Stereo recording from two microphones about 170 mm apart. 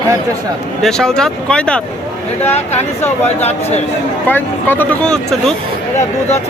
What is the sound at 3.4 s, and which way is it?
Speech, 40° left (ahead or behind).